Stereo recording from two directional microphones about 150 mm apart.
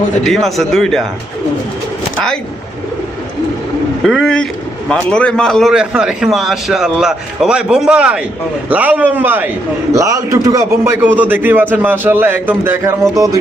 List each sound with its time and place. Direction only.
0.3 s a man's voice: centre (ahead or behind)
4.0 s a man's voice: 5° left (ahead or behind); by 13.4 s 25° right (ahead or behind)